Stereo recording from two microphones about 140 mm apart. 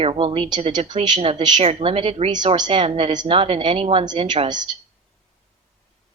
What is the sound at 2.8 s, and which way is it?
A woman's voice, 45° right (ahead or behind).